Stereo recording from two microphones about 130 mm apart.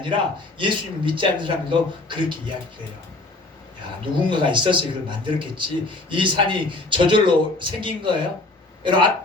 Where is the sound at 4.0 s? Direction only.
40° right (ahead or behind).